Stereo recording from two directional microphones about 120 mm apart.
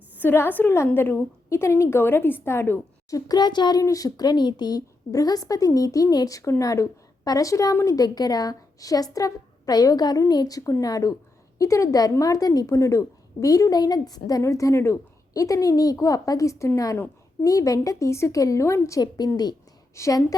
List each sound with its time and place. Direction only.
0.2 s a woman's voice: 15° left (ahead or behind)